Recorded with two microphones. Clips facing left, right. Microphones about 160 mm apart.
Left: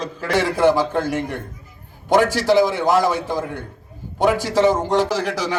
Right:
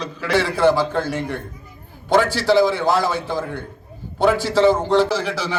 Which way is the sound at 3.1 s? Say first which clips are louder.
Left 1 dB; 45° left (ahead or behind).